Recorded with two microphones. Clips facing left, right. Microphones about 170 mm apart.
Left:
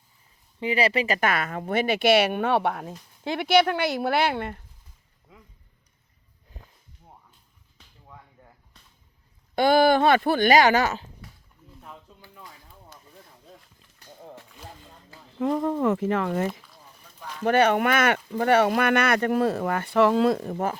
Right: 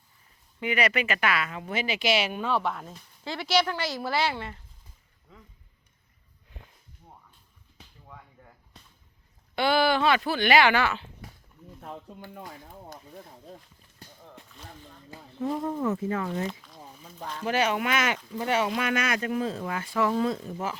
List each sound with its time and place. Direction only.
0.6 s speech: 30° left (ahead or behind); by 4.6 s 55° left (ahead or behind)
9.6 s speech: 45° left (ahead or behind)
12.2 s speech: 50° right (ahead or behind)
15.4 s speech: 90° left; by 16.5 s 70° left (ahead or behind)
17.4 s speech: 55° left (ahead or behind)